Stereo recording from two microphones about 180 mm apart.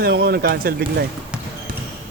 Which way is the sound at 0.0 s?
60° right (ahead or behind).